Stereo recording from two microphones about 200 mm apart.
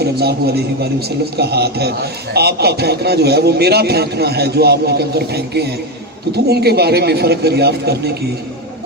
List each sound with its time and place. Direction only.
0.0 s a man's voice: 55° right (ahead or behind)